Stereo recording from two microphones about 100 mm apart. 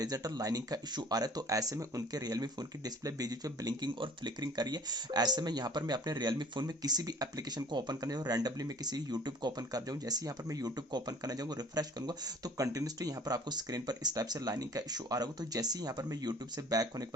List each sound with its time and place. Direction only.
0.0 s speech: 40° right (ahead or behind)